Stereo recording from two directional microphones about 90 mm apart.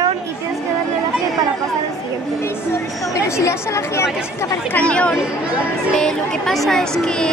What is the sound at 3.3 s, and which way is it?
Speech, 35° left (ahead or behind).